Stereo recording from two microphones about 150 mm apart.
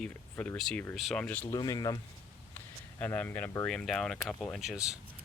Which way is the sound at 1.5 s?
25° left (ahead or behind).